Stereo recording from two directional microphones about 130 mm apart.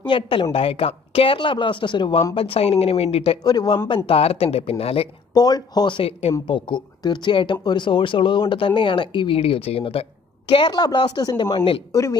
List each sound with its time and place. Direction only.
0.0 s speech: 40° left (ahead or behind)
3.4 s speech: 30° left (ahead or behind)
3.9 s speech: 45° left (ahead or behind)
5.3 s speech: 30° left (ahead or behind); by 10.0 s 50° left (ahead or behind)
10.5 s speech: 35° left (ahead or behind)
11.5 s speech: 45° left (ahead or behind)
11.9 s speech: 25° left (ahead or behind)